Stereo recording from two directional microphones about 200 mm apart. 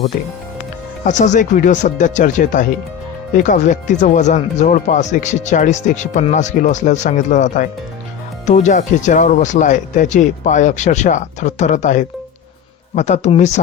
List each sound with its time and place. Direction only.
1.0 s speech: 35° left (ahead or behind)